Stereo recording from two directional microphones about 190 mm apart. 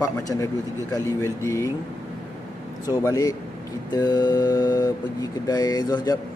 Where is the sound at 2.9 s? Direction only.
20° left (ahead or behind).